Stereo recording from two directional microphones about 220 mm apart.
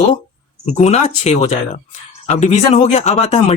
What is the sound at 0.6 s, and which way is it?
Speech, 30° left (ahead or behind).